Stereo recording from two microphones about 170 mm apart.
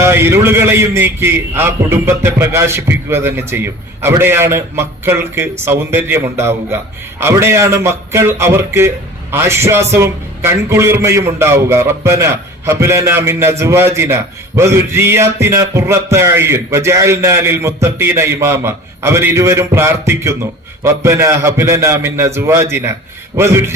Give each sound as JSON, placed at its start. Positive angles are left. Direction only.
{"t": 0.0, "sound": "a man's voice", "side_deg": -15}